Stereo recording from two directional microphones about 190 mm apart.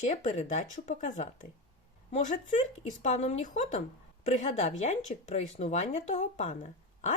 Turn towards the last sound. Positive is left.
turn(degrees=40)  # may be behind; listen again after turning